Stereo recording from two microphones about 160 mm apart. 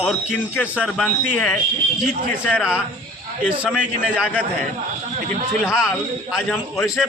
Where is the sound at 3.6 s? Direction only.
5° right (ahead or behind).